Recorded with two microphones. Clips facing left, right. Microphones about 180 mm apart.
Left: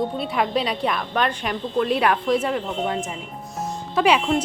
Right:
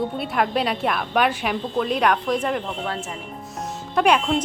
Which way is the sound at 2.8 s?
20° left (ahead or behind).